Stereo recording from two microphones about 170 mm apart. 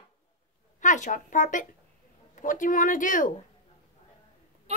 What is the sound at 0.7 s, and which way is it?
Speech, 45° left (ahead or behind).